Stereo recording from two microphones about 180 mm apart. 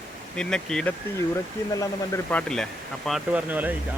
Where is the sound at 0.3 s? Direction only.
5° left (ahead or behind).